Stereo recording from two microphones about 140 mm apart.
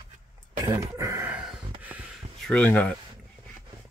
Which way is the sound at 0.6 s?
20° right (ahead or behind).